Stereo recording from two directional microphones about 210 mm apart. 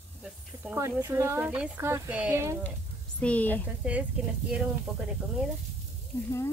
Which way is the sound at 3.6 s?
5° right (ahead or behind).